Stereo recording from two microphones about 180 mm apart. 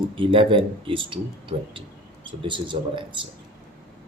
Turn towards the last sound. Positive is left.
turn(degrees=-25)  # may be behind; listen again after turning